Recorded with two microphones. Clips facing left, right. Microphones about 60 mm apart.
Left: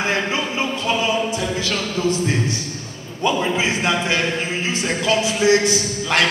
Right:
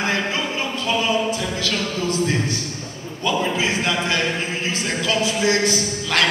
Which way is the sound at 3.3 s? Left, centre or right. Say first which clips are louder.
Left 2 dB; left.